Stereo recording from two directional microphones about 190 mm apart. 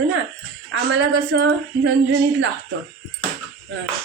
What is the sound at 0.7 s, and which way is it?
Speech, 70° right (ahead or behind).